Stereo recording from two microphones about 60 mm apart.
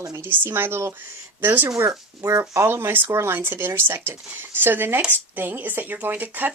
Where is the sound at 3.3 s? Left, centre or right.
Right.